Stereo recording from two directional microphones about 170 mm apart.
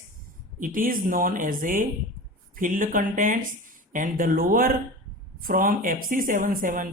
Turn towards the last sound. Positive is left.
turn(degrees=-50)  # may be behind; listen again after turning